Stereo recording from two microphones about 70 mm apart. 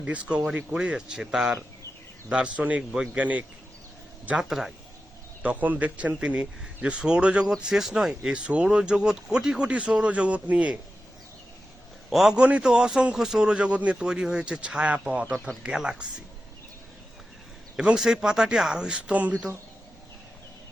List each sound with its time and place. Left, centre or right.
0.0 s speech: centre
4.4 s speech: centre
5.4 s speech: right
12.1 s speech: centre
12.4 s speech: centre
17.7 s speech: centre